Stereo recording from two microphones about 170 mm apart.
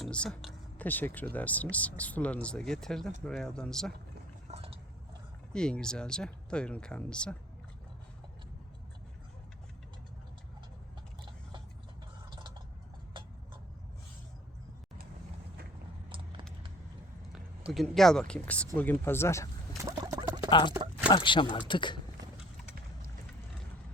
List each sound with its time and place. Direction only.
0.0 s speech: 5° left (ahead or behind)
4.4 s a sound: 35° right (ahead or behind)
5.5 s speech: 5° left (ahead or behind)
17.7 s speech: centre (ahead or behind)
19.8 s a sound: 20° right (ahead or behind)
20.5 s speech: 25° left (ahead or behind)